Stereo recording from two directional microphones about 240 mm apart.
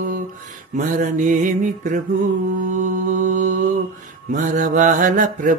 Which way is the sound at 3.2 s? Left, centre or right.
Right.